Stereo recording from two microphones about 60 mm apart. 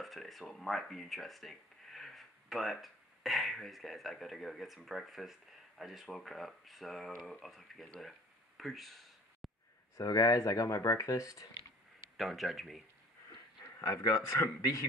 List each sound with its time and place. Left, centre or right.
0.0 s speech: centre
8.5 s a sound: centre
9.9 s speech: left
12.2 s speech: centre
13.7 s a sound: left
14.0 s speech: left